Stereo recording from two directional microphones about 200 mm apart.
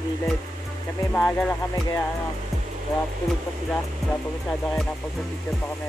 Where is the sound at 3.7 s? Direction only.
5° left (ahead or behind).